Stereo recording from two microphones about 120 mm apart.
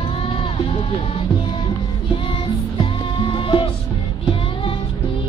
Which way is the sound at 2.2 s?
45° left (ahead or behind).